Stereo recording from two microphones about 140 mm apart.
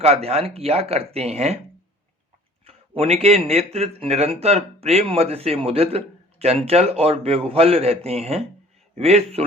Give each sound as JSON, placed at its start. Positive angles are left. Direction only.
{"t": 0.0, "sound": "speech", "side_deg": -50}
{"t": 2.6, "sound": "speech", "side_deg": -45}